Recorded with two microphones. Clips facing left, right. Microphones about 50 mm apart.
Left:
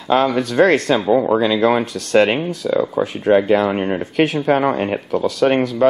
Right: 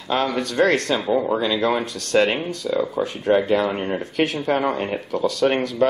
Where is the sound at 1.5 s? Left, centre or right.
Centre.